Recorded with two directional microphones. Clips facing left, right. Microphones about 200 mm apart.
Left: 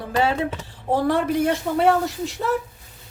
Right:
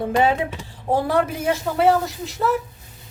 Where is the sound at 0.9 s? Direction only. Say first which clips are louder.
Even; 5° right (ahead or behind).